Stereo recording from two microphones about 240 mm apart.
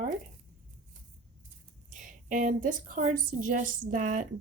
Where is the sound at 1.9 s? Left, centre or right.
Right.